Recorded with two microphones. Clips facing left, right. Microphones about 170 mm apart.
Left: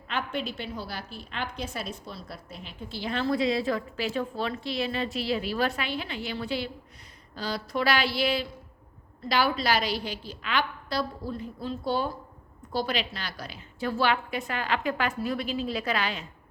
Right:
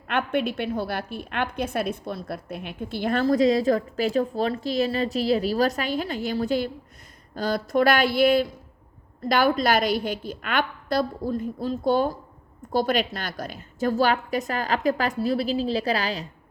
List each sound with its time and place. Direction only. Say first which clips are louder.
0.1 s a woman's voice: right 7 dB; 55° right (ahead or behind); by 16.2 s 35° right (ahead or behind)